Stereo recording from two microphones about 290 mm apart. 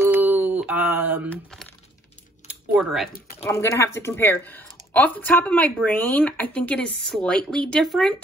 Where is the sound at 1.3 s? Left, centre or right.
Centre.